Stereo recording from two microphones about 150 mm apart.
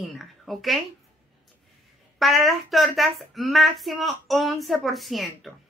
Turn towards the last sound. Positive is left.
turn(degrees=0)  # may be behind; listen again after turning